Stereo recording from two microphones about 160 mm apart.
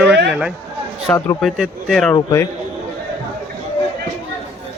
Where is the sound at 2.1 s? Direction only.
20° left (ahead or behind).